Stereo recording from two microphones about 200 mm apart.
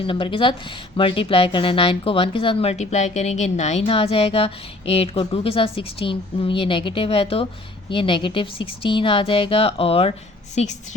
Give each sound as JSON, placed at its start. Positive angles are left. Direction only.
{"t": 0.0, "sound": "speech", "side_deg": 25}